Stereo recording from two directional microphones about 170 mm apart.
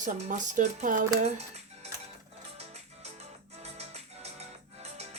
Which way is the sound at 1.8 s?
40° right (ahead or behind).